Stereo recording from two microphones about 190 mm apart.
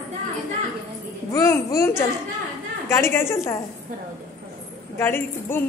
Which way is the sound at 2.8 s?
15° left (ahead or behind).